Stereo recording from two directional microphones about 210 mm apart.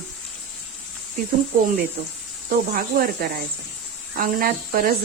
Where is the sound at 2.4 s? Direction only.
45° right (ahead or behind).